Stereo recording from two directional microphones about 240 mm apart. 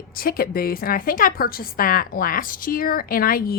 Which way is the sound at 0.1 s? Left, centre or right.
Left.